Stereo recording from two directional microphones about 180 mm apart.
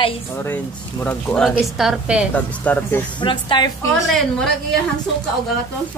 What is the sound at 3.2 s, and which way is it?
Speech, 25° left (ahead or behind).